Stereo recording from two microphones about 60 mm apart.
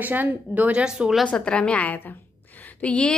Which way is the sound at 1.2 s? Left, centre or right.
Centre.